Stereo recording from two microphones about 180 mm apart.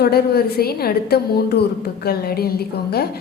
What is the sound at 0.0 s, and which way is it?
A woman's voice, 60° left (ahead or behind).